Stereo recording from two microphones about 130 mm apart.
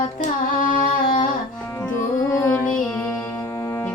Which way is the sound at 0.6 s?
90° left.